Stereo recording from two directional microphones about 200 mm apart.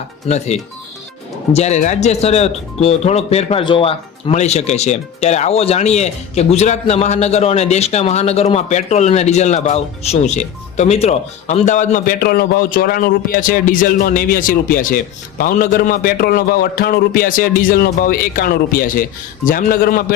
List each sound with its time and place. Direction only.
0.3 s a man's voice: 35° left (ahead or behind)